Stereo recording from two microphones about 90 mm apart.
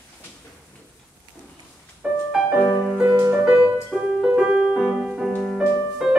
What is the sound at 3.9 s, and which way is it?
Music, 5° left (ahead or behind).